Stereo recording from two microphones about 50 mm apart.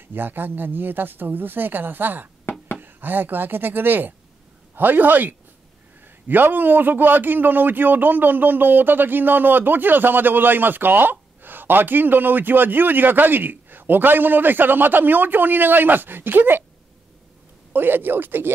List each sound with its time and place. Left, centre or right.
0.1 s a man's voice: right
17.7 s speech: right